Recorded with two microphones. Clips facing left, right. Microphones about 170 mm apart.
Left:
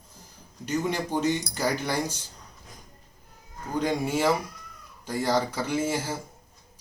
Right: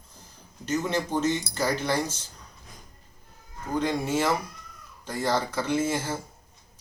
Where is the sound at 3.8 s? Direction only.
10° left (ahead or behind).